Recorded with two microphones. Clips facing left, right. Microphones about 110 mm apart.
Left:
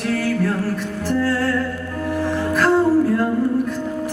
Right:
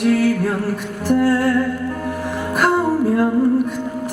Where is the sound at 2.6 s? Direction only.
15° right (ahead or behind).